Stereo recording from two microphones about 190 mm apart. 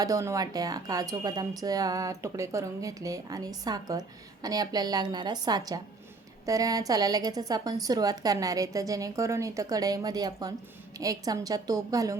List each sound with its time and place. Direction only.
0.0 s speech: 15° right (ahead or behind)